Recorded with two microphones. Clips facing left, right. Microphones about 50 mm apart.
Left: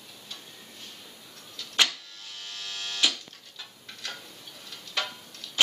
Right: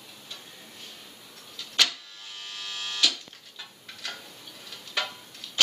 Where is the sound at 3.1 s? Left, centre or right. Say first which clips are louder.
Even; centre.